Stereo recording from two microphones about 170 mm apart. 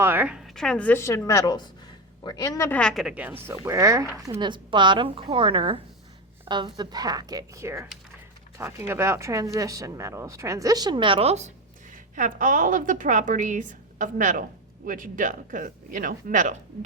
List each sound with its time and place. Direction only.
0.0 s a woman's voice: 10° right (ahead or behind)
8.9 s a woman's voice: 15° right (ahead or behind); by 16.6 s 50° right (ahead or behind)